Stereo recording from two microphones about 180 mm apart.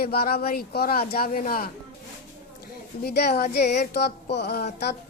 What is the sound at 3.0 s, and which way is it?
Speech, 65° left (ahead or behind).